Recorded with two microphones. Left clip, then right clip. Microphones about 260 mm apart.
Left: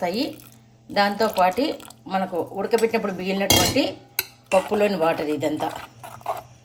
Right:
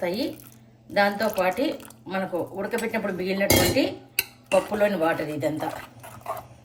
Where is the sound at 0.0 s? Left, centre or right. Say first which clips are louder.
Left 2 dB; left.